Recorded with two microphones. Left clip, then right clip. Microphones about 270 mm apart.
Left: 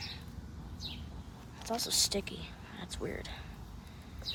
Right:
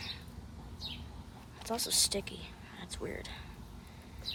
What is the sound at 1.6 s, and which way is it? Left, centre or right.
Speech, centre.